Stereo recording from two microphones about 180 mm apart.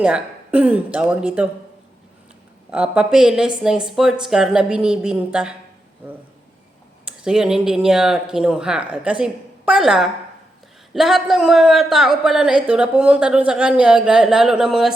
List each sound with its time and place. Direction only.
0.0 s speech: 5° right (ahead or behind)
2.6 s speech: 5° right (ahead or behind)
7.0 s speech: 5° right (ahead or behind)